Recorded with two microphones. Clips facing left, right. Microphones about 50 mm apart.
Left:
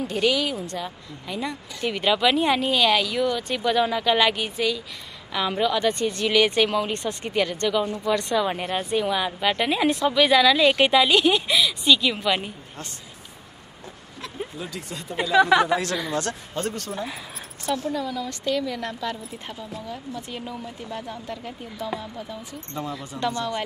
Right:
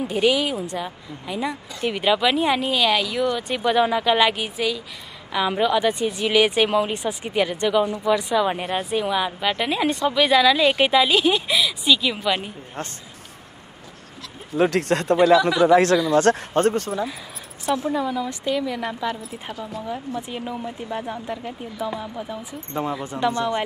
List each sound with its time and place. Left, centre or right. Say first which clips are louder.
0.0 s a woman's voice: right 3 dB; centre
14.6 s speech: right 15 dB; right
15.7 s speech: right 9 dB; right
17.6 s a woman's voice: right 4 dB; right
23.3 s speech: right 4 dB; right